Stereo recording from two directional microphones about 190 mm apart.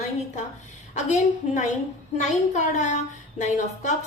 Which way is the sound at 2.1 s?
40° left (ahead or behind).